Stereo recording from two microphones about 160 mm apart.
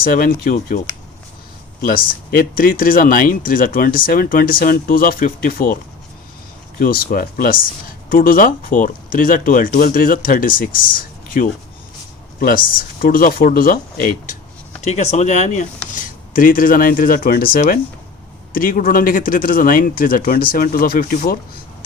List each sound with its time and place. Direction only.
0.0 s speech: 65° left (ahead or behind)
1.8 s speech: 60° left (ahead or behind)
6.7 s speech: 65° left (ahead or behind)
14.8 s speech: 45° left (ahead or behind)
16.0 s speech: 60° left (ahead or behind)